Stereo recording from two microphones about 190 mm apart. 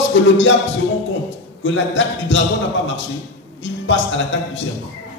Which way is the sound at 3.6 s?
75° left (ahead or behind).